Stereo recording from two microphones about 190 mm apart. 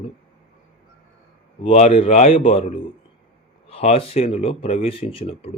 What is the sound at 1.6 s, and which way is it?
Speech, 30° left (ahead or behind).